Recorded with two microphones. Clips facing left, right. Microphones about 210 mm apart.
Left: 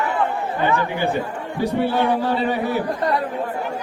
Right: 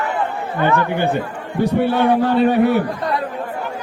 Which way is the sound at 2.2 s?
60° right (ahead or behind).